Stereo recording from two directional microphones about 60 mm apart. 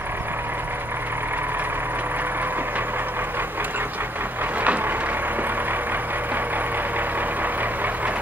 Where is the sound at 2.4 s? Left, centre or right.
Right.